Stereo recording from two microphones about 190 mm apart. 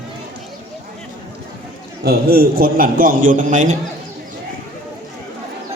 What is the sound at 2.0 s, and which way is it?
A man's voice, 55° right (ahead or behind).